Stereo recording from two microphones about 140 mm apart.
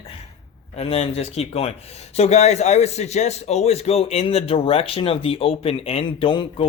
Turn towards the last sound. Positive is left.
turn(degrees=40)  # may be behind; listen again after turning